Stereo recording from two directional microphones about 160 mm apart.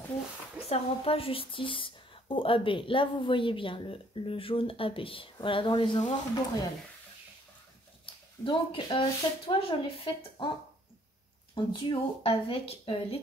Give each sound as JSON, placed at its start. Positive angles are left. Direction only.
{"t": 0.7, "sound": "speech", "side_deg": 35}
{"t": 8.0, "sound": "speech", "side_deg": 30}
{"t": 11.5, "sound": "speech", "side_deg": 35}